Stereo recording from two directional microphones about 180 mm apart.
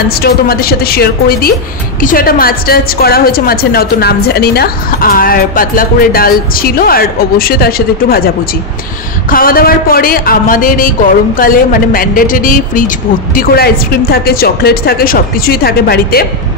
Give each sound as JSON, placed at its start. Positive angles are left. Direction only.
{"t": 0.2, "sound": "a woman's voice", "side_deg": 60}
{"t": 9.3, "sound": "a woman's voice", "side_deg": 50}